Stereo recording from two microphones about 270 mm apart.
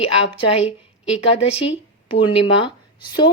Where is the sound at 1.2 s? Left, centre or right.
Left.